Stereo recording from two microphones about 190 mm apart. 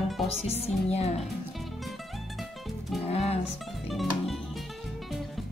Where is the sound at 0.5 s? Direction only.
35° left (ahead or behind).